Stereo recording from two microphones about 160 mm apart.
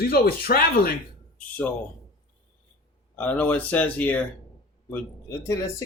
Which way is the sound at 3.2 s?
10° left (ahead or behind).